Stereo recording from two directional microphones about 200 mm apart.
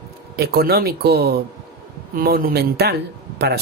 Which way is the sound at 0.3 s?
50° right (ahead or behind).